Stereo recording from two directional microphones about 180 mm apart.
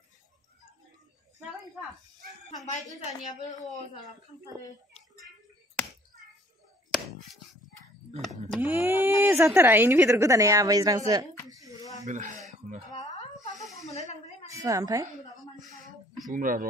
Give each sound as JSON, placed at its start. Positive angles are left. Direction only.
{"t": 2.6, "sound": "a woman's voice", "side_deg": 40}
{"t": 8.5, "sound": "speech", "side_deg": -10}
{"t": 12.1, "sound": "speech", "side_deg": -45}
{"t": 13.8, "sound": "speech", "side_deg": 40}
{"t": 14.5, "sound": "a woman's voice", "side_deg": -15}
{"t": 15.6, "sound": "a sound", "side_deg": -45}
{"t": 16.3, "sound": "speech", "side_deg": -50}